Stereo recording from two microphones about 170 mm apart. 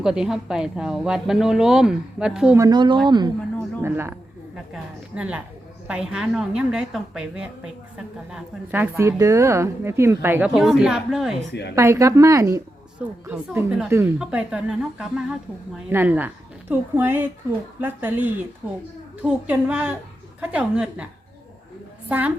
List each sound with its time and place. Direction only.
0.0 s a woman's voice: 5° right (ahead or behind)
2.6 s speech: 25° right (ahead or behind)
3.8 s a woman's voice: 15° right (ahead or behind)
11.7 s a woman's voice: 15° right (ahead or behind)